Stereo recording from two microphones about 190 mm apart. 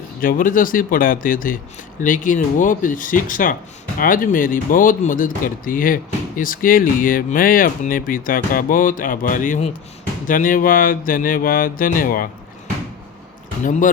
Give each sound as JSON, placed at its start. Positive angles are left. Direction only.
{"t": 0.2, "sound": "speech", "side_deg": 45}
{"t": 13.7, "sound": "speech", "side_deg": 45}